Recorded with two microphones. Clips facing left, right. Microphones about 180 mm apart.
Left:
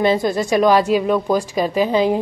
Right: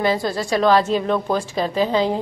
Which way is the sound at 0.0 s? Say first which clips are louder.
Left 4 dB; 20° left (ahead or behind).